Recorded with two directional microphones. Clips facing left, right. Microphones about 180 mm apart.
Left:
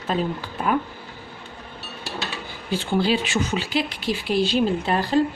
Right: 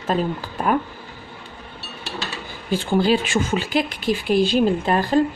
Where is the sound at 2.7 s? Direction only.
45° right (ahead or behind).